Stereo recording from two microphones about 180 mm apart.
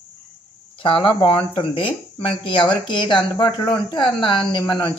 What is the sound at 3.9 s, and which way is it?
Speech, 25° left (ahead or behind).